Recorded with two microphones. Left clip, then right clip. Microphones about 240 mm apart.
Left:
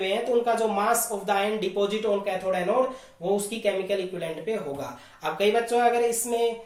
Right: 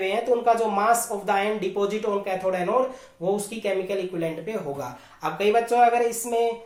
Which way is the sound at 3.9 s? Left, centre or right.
Right.